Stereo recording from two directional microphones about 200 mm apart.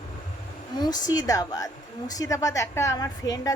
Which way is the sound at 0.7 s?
20° left (ahead or behind).